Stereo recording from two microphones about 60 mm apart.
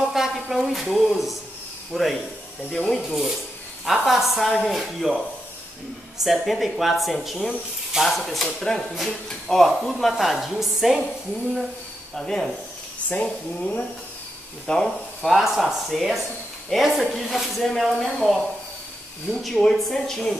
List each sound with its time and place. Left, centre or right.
0.1 s a woman's voice: centre
3.8 s speech: centre
6.1 s speech: centre
12.2 s a woman's voice: centre
13.1 s speech: centre
14.7 s speech: centre
19.4 s a woman's voice: centre